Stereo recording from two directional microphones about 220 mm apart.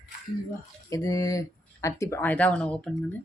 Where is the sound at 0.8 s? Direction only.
15° left (ahead or behind).